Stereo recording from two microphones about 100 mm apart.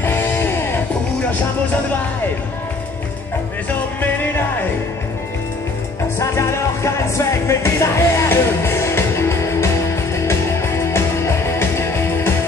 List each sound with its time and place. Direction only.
0.0 s music: 20° left (ahead or behind)
6.1 s music: 25° left (ahead or behind)